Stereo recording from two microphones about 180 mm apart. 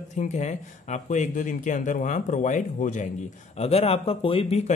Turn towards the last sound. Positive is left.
turn(degrees=35)  # may be behind; listen again after turning